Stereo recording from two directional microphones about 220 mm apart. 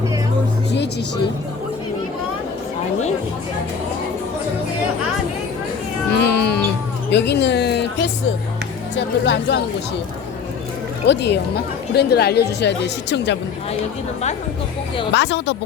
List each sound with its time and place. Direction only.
6.2 s music: 50° left (ahead or behind)
7.1 s speech: 50° left (ahead or behind)
9.0 s speech: 55° left (ahead or behind)
11.0 s speech: 50° left (ahead or behind)
15.1 s speech: 50° left (ahead or behind)